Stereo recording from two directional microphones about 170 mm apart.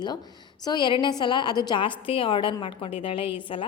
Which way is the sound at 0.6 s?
25° left (ahead or behind).